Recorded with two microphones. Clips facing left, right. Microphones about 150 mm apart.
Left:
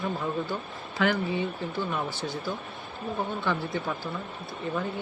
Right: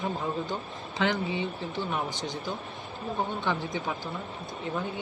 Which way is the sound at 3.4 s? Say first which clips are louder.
Left 1 dB; 15° right (ahead or behind).